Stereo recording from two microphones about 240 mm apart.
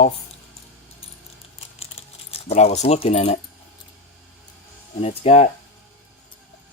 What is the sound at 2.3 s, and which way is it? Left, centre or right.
Speech, left.